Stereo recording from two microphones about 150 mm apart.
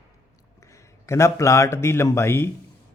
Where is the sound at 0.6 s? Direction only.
20° left (ahead or behind).